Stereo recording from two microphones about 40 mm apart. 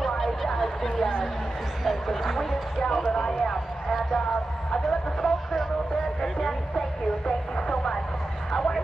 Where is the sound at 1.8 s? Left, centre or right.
Centre.